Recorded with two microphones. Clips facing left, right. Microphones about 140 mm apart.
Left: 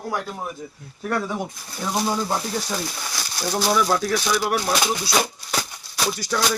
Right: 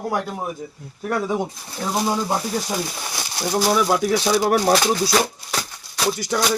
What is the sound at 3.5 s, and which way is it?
Speech, 10° right (ahead or behind).